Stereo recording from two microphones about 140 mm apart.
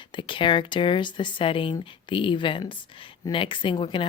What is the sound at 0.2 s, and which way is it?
Speech, 35° left (ahead or behind).